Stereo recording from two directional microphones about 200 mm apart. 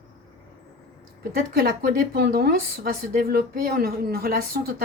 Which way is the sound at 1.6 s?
50° right (ahead or behind).